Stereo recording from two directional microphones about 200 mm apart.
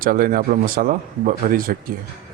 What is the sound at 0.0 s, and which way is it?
Speech, 45° right (ahead or behind).